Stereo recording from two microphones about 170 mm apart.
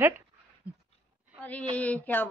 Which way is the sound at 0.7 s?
10° right (ahead or behind).